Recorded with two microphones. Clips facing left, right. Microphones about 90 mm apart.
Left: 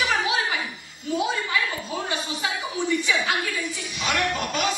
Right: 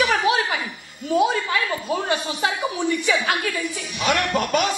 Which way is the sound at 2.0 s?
60° right (ahead or behind).